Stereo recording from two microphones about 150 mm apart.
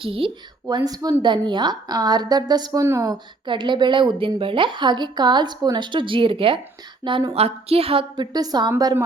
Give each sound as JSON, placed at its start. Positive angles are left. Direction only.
{"t": 0.0, "sound": "speech", "side_deg": -35}
{"t": 0.9, "sound": "a woman's voice", "side_deg": -25}